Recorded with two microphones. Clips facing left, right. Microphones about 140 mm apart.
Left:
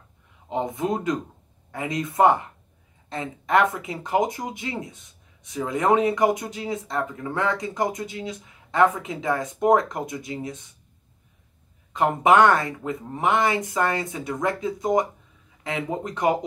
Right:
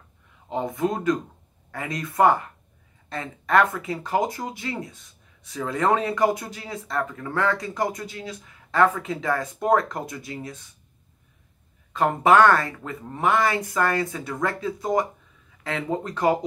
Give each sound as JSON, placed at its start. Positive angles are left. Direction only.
{"t": 0.5, "sound": "speech", "side_deg": 20}
{"t": 11.9, "sound": "speech", "side_deg": 20}